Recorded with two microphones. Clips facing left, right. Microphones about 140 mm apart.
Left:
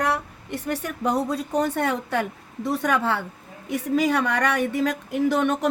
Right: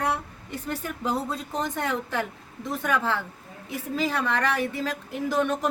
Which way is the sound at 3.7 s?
75° left (ahead or behind).